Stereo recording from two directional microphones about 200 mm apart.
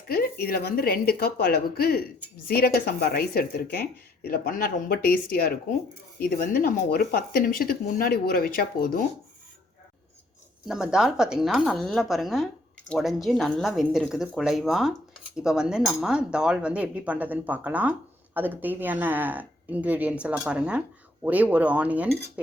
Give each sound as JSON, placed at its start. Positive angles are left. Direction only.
{"t": 0.1, "sound": "speech", "side_deg": 50}
{"t": 10.7, "sound": "speech", "side_deg": -5}